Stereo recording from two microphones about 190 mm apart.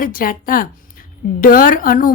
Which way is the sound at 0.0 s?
50° left (ahead or behind).